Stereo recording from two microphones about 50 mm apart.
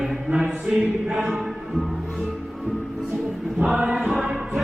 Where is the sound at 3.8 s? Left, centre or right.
Centre.